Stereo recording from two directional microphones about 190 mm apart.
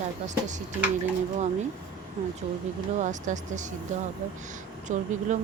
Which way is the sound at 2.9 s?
40° right (ahead or behind).